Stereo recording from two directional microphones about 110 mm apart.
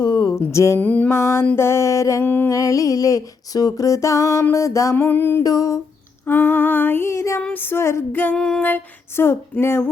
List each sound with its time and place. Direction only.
0.0 s a sound: 40° left (ahead or behind)
0.3 s music: 25° left (ahead or behind)
0.8 s female singing: 15° left (ahead or behind)
1.5 s music: 25° left (ahead or behind)
2.2 s music: 20° left (ahead or behind)
2.6 s music: 30° left (ahead or behind)
5.4 s a sound: 30° left (ahead or behind)
6.2 s music: 20° left (ahead or behind)
7.4 s female singing: 15° left (ahead or behind)
8.4 s female singing: 5° left (ahead or behind)
8.6 s music: 20° left (ahead or behind)